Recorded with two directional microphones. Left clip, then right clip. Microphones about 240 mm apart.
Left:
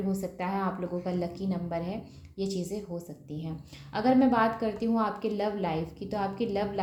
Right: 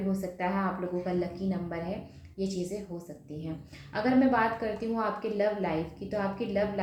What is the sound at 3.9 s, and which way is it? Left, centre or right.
A woman's voice, left.